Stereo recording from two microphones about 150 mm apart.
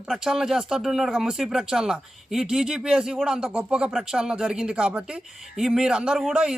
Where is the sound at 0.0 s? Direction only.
5° right (ahead or behind).